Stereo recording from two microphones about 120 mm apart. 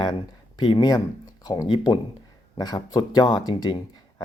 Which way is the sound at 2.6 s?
35° left (ahead or behind).